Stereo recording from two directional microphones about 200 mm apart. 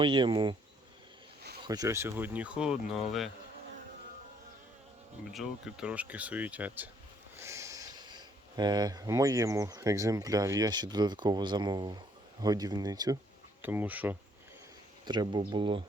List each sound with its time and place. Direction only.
0.0 s speech: 25° right (ahead or behind)
1.6 s speech: 20° right (ahead or behind); by 3.2 s centre (ahead or behind)
5.3 s speech: centre (ahead or behind)
15.0 s speech: 20° right (ahead or behind)